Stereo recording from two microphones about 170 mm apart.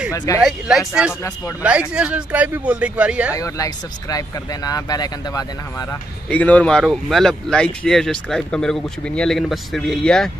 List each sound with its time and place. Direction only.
0.1 s speech: 20° left (ahead or behind)
0.4 s speech: centre (ahead or behind)
3.3 s speech: 20° left (ahead or behind)
6.2 s speech: 10° left (ahead or behind)